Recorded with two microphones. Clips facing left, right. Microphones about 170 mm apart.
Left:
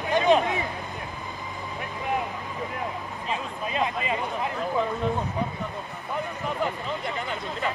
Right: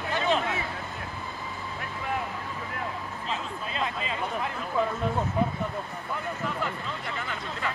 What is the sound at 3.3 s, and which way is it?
Speech, 15° left (ahead or behind).